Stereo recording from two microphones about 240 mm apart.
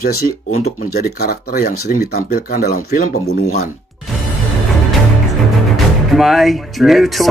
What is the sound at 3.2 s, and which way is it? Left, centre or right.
Speech, left.